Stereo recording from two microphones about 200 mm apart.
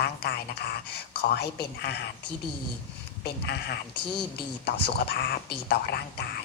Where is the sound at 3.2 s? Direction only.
55° left (ahead or behind).